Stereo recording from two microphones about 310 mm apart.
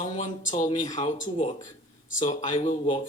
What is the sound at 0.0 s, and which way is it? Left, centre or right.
Speech, left.